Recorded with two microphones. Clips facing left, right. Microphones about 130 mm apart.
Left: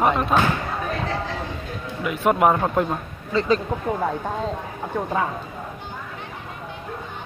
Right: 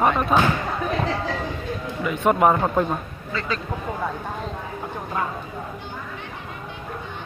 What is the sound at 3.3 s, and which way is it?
Speech, 35° left (ahead or behind).